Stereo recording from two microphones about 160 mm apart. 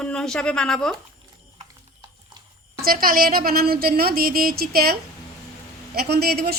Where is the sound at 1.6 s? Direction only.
30° right (ahead or behind).